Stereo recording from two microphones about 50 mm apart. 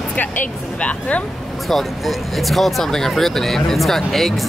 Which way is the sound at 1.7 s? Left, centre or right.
Centre.